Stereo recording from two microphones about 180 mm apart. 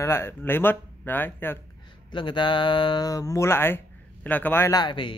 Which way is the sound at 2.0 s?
25° left (ahead or behind).